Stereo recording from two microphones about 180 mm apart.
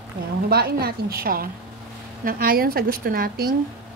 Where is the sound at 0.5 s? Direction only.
60° right (ahead or behind).